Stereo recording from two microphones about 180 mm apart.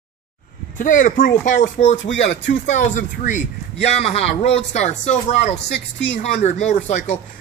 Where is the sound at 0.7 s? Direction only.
45° left (ahead or behind).